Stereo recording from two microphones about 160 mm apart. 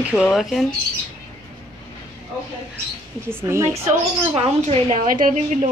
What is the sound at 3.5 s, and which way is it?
Speech, 15° right (ahead or behind).